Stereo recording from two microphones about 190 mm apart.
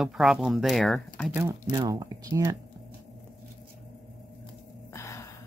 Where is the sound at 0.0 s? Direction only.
Centre (ahead or behind).